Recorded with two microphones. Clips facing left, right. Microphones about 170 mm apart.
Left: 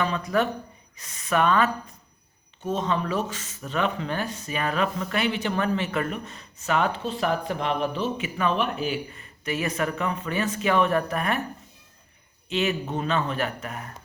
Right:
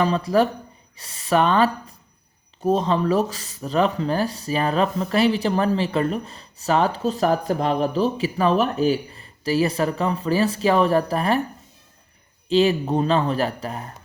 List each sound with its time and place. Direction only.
0.0 s speech: 35° right (ahead or behind)
12.5 s speech: 35° right (ahead or behind)